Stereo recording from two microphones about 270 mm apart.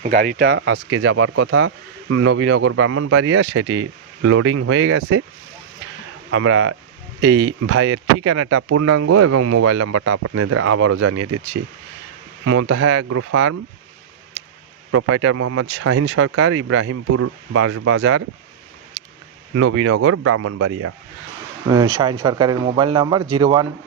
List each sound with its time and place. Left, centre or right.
0.0 s speech: right
6.3 s speech: right
14.9 s speech: right
19.5 s speech: right
21.7 s speech: centre